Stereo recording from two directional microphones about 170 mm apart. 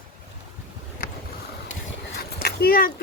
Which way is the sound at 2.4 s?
70° left (ahead or behind).